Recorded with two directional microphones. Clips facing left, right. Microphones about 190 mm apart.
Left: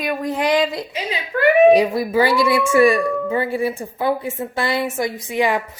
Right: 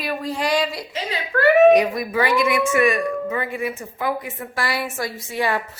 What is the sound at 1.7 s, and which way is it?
A child's voice, 30° left (ahead or behind).